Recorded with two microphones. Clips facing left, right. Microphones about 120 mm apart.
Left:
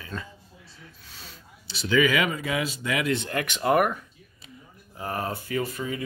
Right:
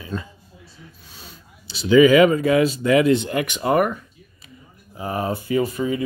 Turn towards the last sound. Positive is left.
turn(degrees=-20)  # may be behind; listen again after turning